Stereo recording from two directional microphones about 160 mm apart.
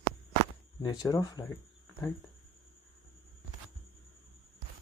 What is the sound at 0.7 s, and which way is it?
Speech, 25° left (ahead or behind).